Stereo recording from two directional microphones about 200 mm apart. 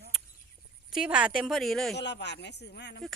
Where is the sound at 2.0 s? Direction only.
60° left (ahead or behind).